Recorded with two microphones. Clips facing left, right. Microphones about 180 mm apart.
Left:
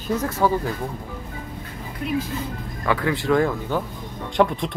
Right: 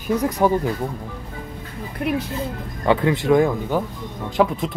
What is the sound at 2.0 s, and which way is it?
Speech, 60° right (ahead or behind).